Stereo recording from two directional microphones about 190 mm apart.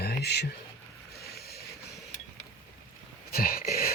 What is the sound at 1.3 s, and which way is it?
Vehicle, 55° left (ahead or behind).